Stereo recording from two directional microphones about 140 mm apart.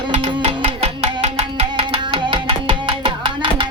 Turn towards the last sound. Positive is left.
turn(degrees=-35)  # may be behind; listen again after turning